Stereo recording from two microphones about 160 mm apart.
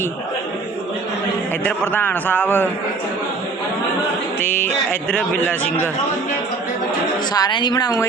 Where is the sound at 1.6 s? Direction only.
10° left (ahead or behind).